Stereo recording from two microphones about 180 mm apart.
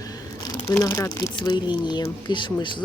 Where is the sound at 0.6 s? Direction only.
15° left (ahead or behind).